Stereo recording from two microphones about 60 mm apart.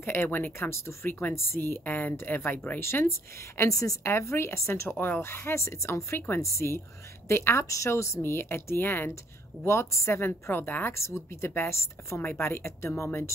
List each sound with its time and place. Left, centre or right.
0.0 s speech: left
0.7 s a woman's voice: left
2.8 s a woman's voice: left
4.1 s a woman's voice: left
4.9 s a woman's voice: left
7.6 s speech: left
8.2 s a woman's voice: left
9.7 s a woman's voice: left
10.5 s speech: left
10.9 s a woman's voice: left